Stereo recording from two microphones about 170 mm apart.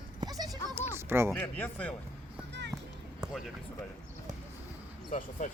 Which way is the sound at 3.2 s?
5° right (ahead or behind).